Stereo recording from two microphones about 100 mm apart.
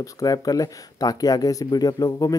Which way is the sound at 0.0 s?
35° left (ahead or behind).